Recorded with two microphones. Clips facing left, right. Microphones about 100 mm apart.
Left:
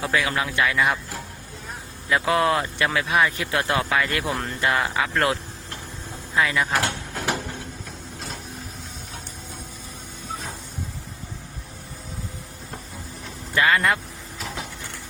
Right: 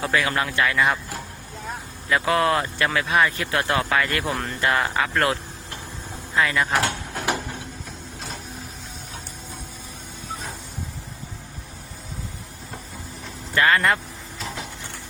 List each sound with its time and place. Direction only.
0.0 s speech: 10° left (ahead or behind)
2.0 s speech: 20° left (ahead or behind); by 4.5 s centre (ahead or behind)
4.6 s speech: 15° left (ahead or behind)
4.9 s speech: centre (ahead or behind)
6.3 s speech: 15° left (ahead or behind)
6.7 s a sound: 20° right (ahead or behind)
13.5 s speech: 10° left (ahead or behind)